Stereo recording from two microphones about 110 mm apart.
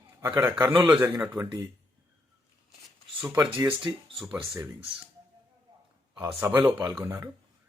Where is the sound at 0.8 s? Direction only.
20° right (ahead or behind).